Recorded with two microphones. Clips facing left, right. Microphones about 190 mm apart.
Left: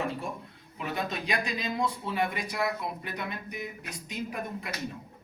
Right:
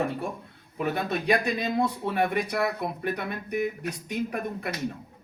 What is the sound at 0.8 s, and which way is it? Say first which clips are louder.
Speech: right 5 dB; 60° right (ahead or behind).